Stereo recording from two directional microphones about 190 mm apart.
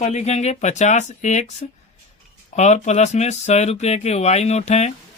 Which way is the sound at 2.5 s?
35° left (ahead or behind).